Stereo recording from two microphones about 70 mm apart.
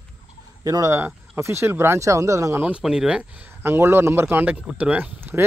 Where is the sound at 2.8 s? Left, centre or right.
Centre.